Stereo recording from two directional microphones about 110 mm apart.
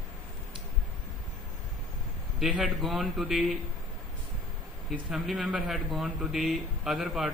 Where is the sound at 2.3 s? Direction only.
Centre (ahead or behind).